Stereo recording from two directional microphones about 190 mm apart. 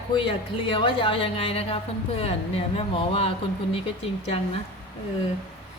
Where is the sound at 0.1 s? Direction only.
25° left (ahead or behind).